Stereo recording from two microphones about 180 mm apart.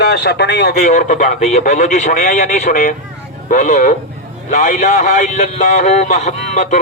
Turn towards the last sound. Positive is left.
turn(degrees=40)  # may be behind; listen again after turning